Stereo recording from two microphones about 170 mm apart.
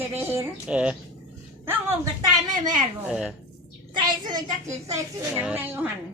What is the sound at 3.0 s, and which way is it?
Speech, 5° right (ahead or behind).